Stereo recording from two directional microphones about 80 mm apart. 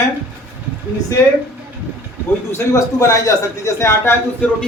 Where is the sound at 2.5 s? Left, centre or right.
Left.